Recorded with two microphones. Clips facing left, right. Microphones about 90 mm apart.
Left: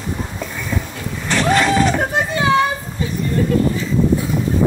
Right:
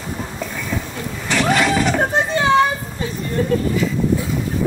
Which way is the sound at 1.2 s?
40° left (ahead or behind).